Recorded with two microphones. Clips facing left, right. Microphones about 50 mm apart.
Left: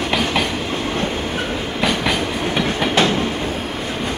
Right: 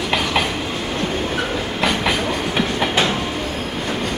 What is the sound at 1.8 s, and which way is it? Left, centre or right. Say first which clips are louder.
Train: even; centre.